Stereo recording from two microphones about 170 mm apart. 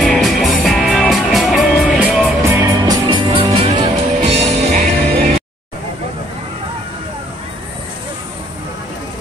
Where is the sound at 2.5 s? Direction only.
20° right (ahead or behind); by 4.8 s 40° right (ahead or behind).